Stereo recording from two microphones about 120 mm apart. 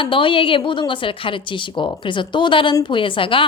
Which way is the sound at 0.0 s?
45° left (ahead or behind).